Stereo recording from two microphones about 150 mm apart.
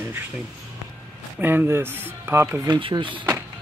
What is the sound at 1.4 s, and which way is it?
Speech, 15° right (ahead or behind).